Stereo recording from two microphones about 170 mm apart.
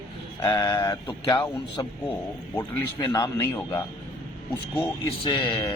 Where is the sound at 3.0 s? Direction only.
25° left (ahead or behind).